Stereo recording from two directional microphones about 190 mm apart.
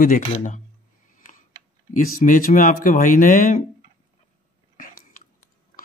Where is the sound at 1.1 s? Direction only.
45° left (ahead or behind).